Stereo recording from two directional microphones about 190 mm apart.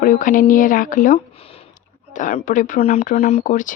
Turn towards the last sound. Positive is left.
turn(degrees=45)  # may be behind; listen again after turning